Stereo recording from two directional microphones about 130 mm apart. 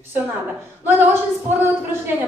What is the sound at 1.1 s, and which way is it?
A woman's voice, 15° right (ahead or behind).